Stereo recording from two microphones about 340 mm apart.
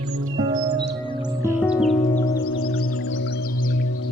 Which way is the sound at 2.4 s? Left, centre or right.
Left.